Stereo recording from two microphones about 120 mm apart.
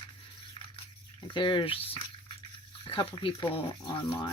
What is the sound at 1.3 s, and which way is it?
Speech, 40° left (ahead or behind).